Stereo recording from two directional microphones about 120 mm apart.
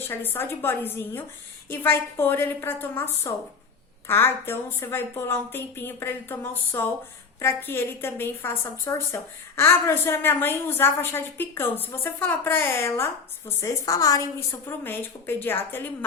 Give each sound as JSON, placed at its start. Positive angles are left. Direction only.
{"t": 0.0, "sound": "a woman's voice", "side_deg": 15}
{"t": 14.7, "sound": "a woman's voice", "side_deg": 20}